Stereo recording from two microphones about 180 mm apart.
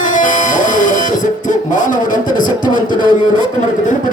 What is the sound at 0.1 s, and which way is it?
Music, 45° left (ahead or behind).